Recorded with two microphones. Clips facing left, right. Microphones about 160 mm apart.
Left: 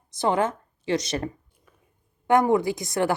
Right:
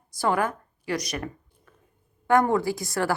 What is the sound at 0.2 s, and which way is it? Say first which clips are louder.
A woman's voice: left 2 dB; 20° left (ahead or behind).